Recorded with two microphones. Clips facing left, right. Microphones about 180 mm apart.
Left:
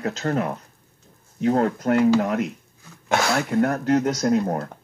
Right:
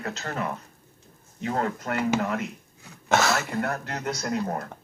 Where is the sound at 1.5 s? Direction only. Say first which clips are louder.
Left 8 dB; 40° left (ahead or behind).